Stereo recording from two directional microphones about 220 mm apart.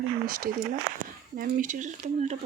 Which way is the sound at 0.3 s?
40° right (ahead or behind).